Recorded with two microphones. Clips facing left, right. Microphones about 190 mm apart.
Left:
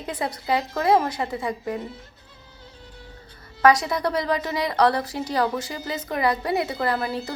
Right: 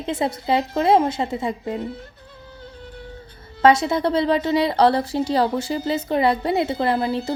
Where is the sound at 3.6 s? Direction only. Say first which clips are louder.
Right 3 dB; 25° right (ahead or behind).